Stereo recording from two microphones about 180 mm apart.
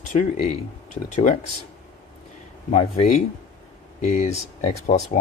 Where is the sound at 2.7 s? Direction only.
35° left (ahead or behind).